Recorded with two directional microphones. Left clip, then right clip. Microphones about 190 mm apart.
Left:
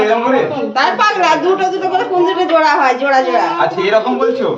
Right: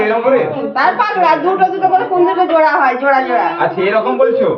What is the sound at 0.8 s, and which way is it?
Speech, 75° left (ahead or behind).